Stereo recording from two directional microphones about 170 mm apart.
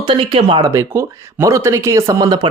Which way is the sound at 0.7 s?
15° right (ahead or behind).